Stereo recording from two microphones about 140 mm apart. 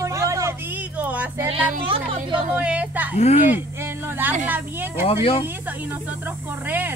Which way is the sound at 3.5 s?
15° right (ahead or behind).